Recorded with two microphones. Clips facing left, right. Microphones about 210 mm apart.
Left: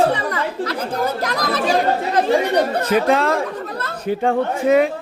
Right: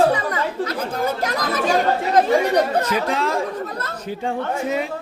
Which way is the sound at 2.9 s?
55° left (ahead or behind).